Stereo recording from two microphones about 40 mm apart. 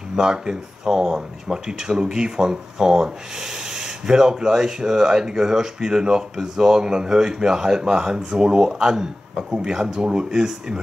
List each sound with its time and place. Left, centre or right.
0.1 s speech: centre